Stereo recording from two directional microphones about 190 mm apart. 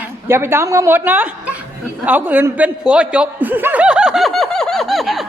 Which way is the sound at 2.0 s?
10° right (ahead or behind).